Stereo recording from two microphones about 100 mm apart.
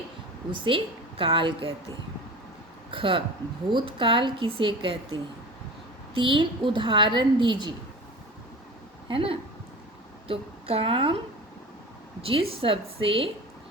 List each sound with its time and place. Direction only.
0.6 s a woman's voice: 60° right (ahead or behind)
2.9 s a woman's voice: 60° right (ahead or behind)
9.0 s a woman's voice: 65° right (ahead or behind)
12.2 s a woman's voice: 70° right (ahead or behind)